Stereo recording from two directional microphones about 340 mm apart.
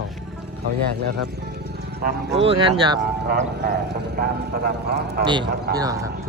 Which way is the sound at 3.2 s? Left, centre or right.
Right.